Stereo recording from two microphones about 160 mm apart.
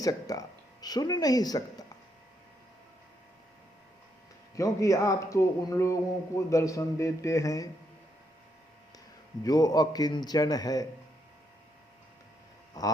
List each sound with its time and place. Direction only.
0.0 s speech: 20° left (ahead or behind)
4.5 s speech: 20° left (ahead or behind)
9.4 s speech: 20° left (ahead or behind)